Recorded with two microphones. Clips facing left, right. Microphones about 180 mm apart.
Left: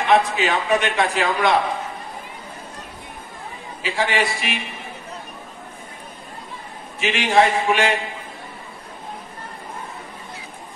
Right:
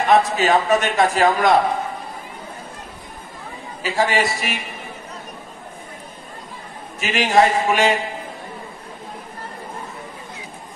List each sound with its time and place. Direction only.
0.0 s a man's voice: 45° right (ahead or behind)
3.8 s a man's voice: 40° right (ahead or behind)
7.0 s a man's voice: 40° right (ahead or behind)